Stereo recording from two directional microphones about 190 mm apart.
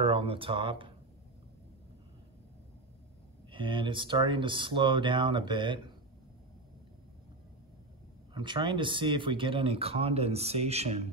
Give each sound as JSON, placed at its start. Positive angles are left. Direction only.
{"t": 0.0, "sound": "speech", "side_deg": -30}
{"t": 3.4, "sound": "speech", "side_deg": -25}
{"t": 8.4, "sound": "speech", "side_deg": -25}